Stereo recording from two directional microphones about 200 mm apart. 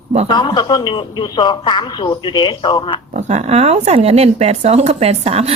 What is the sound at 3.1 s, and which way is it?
Speech, 35° right (ahead or behind).